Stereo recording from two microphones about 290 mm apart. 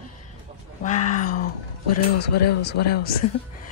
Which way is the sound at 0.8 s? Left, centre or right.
Left.